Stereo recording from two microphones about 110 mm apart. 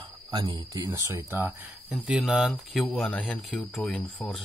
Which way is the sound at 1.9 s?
5° right (ahead or behind).